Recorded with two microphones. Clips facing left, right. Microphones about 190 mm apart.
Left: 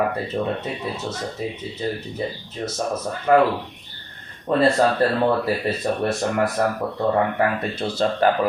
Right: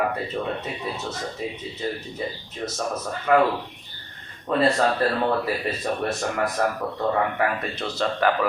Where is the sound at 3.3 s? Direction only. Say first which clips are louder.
Left 3 dB; 35° left (ahead or behind).